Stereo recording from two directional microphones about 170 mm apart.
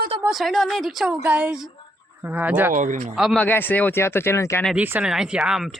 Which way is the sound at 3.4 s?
10° left (ahead or behind).